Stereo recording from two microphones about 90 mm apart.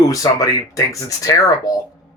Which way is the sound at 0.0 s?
40° left (ahead or behind).